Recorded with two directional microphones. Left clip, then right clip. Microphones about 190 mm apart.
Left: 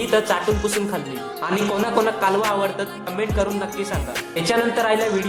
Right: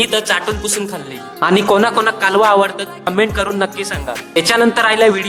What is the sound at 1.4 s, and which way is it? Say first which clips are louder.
A man's voice: right 11 dB; 45° right (ahead or behind).